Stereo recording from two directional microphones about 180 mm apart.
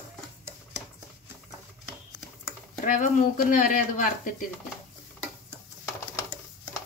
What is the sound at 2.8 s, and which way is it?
Speech, 45° left (ahead or behind).